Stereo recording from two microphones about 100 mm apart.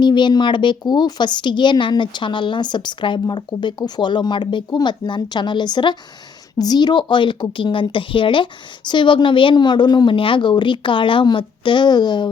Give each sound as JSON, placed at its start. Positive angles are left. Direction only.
{"t": 0.0, "sound": "speech", "side_deg": 50}